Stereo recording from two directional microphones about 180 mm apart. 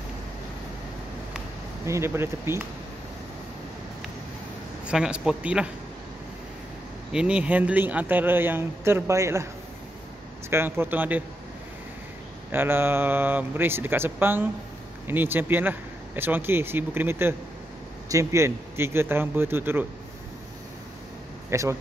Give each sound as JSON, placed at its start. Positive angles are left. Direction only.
{"t": 1.9, "sound": "a man's voice", "side_deg": -15}
{"t": 4.8, "sound": "speech", "side_deg": -5}
{"t": 7.1, "sound": "a man's voice", "side_deg": -5}
{"t": 10.5, "sound": "a man's voice", "side_deg": -10}
{"t": 12.4, "sound": "a man's voice", "side_deg": -10}
{"t": 21.5, "sound": "speech", "side_deg": -15}